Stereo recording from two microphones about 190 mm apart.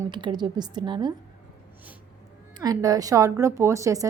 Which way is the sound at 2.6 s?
20° right (ahead or behind).